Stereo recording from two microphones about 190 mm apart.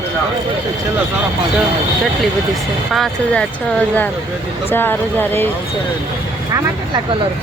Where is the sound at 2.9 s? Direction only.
5° left (ahead or behind).